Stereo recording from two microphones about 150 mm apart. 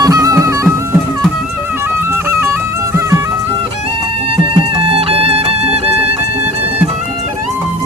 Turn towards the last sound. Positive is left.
turn(degrees=-40)  # may be behind; listen again after turning